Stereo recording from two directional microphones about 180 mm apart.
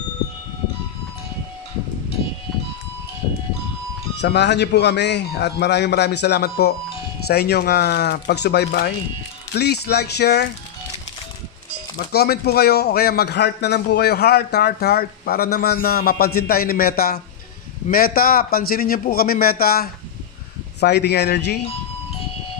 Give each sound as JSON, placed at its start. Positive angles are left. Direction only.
{"t": 4.2, "sound": "a man's voice", "side_deg": 70}
{"t": 12.1, "sound": "a man's voice", "side_deg": 60}